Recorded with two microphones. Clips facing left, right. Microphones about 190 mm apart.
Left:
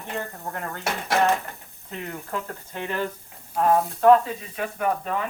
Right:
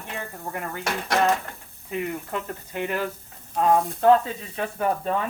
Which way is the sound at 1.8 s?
15° right (ahead or behind).